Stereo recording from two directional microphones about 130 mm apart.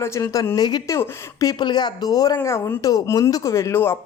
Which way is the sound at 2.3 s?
20° left (ahead or behind).